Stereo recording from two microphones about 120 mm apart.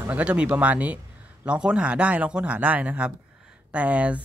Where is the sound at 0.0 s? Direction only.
10° right (ahead or behind).